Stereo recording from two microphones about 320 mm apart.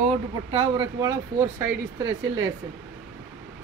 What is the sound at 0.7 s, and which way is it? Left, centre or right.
Speech, centre.